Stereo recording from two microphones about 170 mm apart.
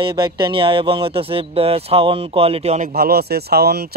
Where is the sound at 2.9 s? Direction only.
65° right (ahead or behind).